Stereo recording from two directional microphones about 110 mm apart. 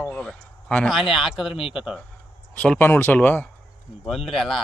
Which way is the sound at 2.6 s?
15° left (ahead or behind).